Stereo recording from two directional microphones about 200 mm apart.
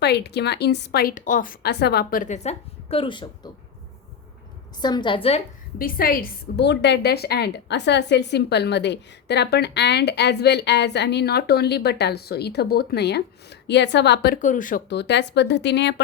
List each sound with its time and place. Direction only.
0.0 s a woman's voice: 55° left (ahead or behind); by 3.5 s 25° left (ahead or behind)
4.8 s a woman's voice: 20° left (ahead or behind)
5.8 s a woman's voice: 45° left (ahead or behind)
14.4 s speech: 40° left (ahead or behind)
14.8 s a woman's voice: 60° left (ahead or behind)